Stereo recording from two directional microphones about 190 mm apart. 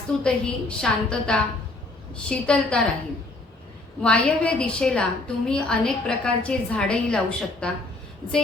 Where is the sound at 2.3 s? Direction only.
5° left (ahead or behind).